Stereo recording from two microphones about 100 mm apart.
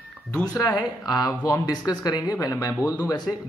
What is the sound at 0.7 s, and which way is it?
Speech, 45° left (ahead or behind).